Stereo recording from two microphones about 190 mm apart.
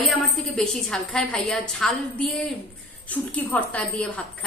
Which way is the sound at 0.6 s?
Centre (ahead or behind).